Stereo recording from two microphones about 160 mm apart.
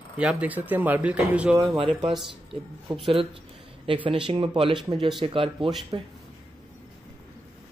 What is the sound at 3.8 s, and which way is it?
Speech, 35° right (ahead or behind).